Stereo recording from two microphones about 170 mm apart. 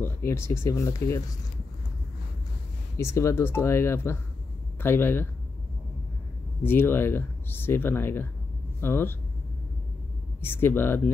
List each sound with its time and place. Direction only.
0.0 s speech: 15° left (ahead or behind)
3.0 s speech: 15° left (ahead or behind)
6.6 s speech: 15° left (ahead or behind)
10.4 s speech: 15° left (ahead or behind)